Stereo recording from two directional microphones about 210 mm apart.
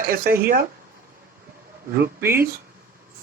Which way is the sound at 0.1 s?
45° right (ahead or behind).